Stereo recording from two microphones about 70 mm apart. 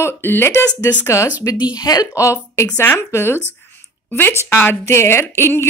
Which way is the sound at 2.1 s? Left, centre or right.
Left.